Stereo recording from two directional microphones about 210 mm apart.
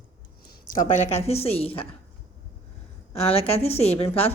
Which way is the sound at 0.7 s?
40° left (ahead or behind).